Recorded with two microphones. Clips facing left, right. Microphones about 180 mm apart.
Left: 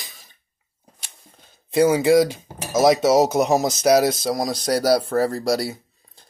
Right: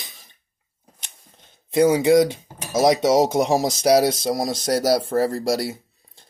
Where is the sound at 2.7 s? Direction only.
25° left (ahead or behind).